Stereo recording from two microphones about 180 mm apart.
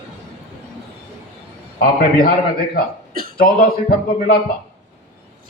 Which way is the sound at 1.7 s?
55° left (ahead or behind).